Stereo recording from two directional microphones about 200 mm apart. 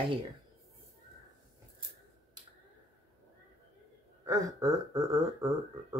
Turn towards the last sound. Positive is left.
turn(degrees=-15)  # may be behind; listen again after turning